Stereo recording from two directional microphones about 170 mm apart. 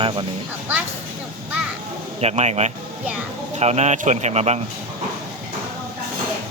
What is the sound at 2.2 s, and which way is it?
A man's voice, 40° right (ahead or behind).